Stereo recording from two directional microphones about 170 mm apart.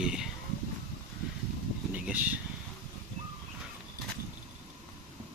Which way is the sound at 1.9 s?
10° right (ahead or behind).